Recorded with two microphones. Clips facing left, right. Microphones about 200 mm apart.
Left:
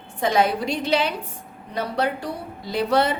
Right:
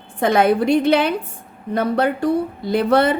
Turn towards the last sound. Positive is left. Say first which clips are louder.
# right 5 dB
turn(degrees=-55)  # may be behind; listen again after turning